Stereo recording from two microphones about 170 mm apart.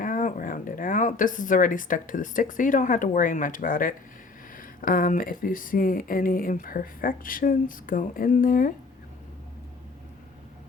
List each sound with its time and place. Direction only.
0.0 s speech: 50° left (ahead or behind)